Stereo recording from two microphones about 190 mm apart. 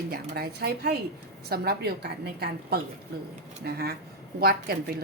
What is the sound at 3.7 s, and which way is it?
A woman's voice, 55° right (ahead or behind).